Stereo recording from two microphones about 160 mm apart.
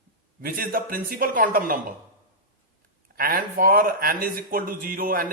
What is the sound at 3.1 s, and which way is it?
Speech, 65° right (ahead or behind).